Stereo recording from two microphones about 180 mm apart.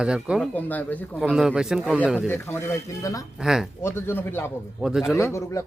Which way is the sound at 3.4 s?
Centre (ahead or behind).